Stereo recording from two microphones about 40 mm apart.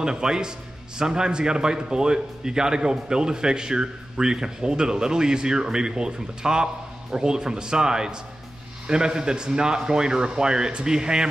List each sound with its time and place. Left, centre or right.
0.0 s a man's voice: centre